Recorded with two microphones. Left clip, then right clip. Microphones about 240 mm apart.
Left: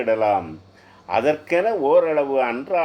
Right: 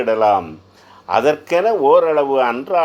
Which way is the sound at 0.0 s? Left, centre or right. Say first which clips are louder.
Right 5 dB; right.